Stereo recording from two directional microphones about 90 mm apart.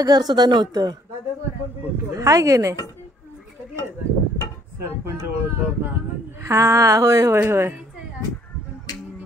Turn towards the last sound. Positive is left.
turn(degrees=-25)  # may be behind; listen again after turning